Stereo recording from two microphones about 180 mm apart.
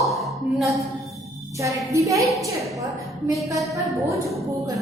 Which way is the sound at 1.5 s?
15° right (ahead or behind).